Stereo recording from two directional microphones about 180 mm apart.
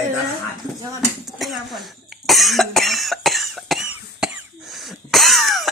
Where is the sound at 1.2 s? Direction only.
Centre (ahead or behind).